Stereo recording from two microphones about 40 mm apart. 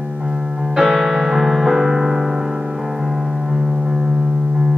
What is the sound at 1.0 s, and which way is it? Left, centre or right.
Music, centre.